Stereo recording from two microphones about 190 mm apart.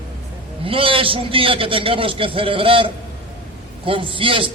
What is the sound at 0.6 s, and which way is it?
A man's voice, 30° right (ahead or behind).